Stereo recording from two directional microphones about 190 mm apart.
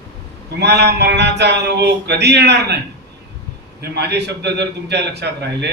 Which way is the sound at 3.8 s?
60° right (ahead or behind).